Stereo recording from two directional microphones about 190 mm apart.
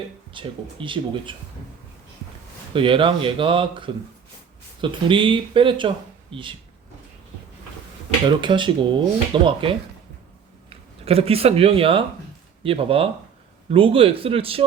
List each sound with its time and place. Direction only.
0.3 s speech: 25° right (ahead or behind)
2.7 s speech: 25° right (ahead or behind)
8.4 s speech: 25° right (ahead or behind)